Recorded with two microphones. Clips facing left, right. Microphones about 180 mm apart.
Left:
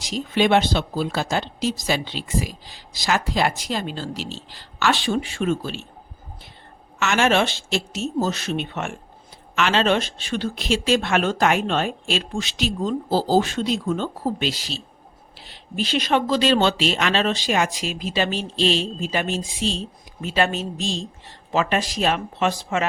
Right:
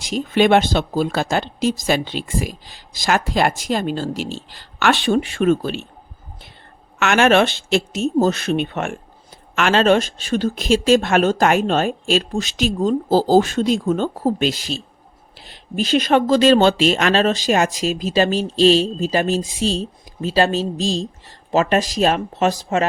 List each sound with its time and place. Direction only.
0.0 s speech: 55° right (ahead or behind)
7.0 s speech: 60° right (ahead or behind); by 22.9 s 40° right (ahead or behind)